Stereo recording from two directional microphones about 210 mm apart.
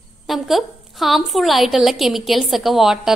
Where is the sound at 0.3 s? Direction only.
Centre (ahead or behind).